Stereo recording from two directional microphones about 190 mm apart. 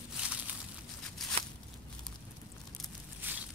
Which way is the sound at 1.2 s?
Centre (ahead or behind).